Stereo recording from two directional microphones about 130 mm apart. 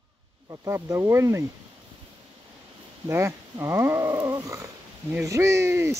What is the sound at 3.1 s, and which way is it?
Speech, 20° right (ahead or behind).